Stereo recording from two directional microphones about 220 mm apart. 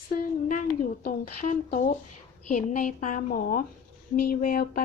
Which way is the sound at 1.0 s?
40° left (ahead or behind).